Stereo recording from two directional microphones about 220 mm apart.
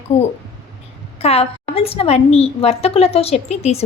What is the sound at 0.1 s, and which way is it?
A woman's voice, 30° left (ahead or behind).